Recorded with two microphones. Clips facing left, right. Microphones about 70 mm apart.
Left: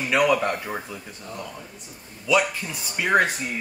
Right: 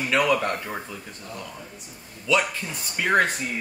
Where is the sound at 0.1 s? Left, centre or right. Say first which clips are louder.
Left 2 dB; centre.